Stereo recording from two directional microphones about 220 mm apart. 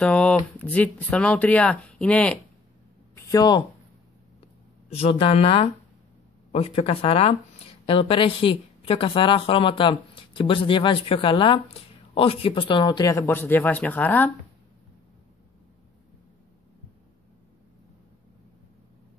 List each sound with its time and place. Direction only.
0.0 s speech: 5° left (ahead or behind)
3.2 s speech: 15° left (ahead or behind)
4.9 s a woman's voice: 25° left (ahead or behind); by 14.3 s 10° left (ahead or behind)